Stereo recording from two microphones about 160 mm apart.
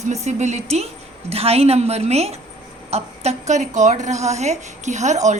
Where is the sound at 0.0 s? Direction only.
45° right (ahead or behind).